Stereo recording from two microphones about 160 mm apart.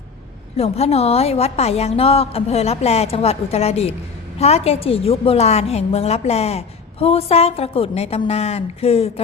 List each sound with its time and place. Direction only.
0.5 s a woman's voice: 40° left (ahead or behind)